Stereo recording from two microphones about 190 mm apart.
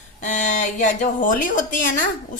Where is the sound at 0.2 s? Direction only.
40° left (ahead or behind).